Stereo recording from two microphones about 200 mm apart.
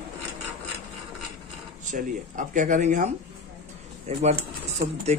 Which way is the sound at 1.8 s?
40° right (ahead or behind).